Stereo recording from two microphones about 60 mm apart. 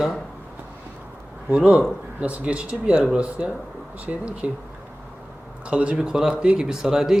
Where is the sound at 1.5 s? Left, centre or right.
Right.